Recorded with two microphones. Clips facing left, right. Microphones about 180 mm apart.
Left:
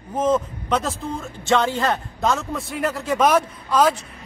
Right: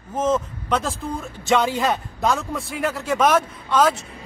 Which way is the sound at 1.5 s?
15° right (ahead or behind).